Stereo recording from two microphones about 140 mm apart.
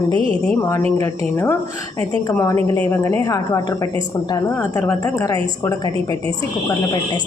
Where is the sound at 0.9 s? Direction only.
20° left (ahead or behind).